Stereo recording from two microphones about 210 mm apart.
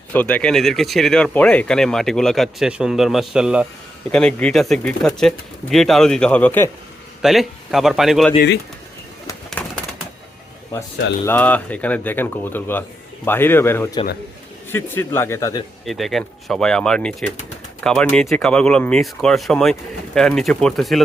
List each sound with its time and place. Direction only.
0.1 s speech: 5° left (ahead or behind)
9.6 s bird: 5° left (ahead or behind)
11.3 s speech: 5° left (ahead or behind)
15.9 s speech: centre (ahead or behind)